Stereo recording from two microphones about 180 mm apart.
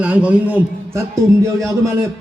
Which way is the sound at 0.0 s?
5° right (ahead or behind).